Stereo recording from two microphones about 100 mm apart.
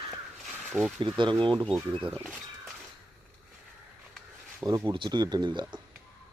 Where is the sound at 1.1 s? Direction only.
50° right (ahead or behind).